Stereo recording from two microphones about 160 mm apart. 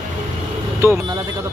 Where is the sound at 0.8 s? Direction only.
15° right (ahead or behind).